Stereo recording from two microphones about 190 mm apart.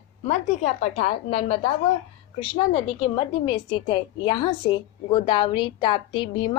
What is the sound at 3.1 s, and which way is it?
A woman's voice, 25° left (ahead or behind).